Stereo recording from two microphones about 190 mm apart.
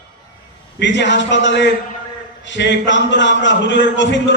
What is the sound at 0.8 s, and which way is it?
A man's voice, 70° left (ahead or behind).